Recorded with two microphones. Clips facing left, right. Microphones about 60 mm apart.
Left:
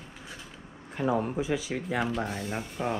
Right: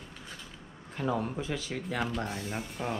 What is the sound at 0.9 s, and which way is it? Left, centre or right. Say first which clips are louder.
Speech: left 4 dB; centre.